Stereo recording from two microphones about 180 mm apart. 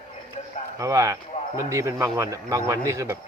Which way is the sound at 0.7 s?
15° right (ahead or behind).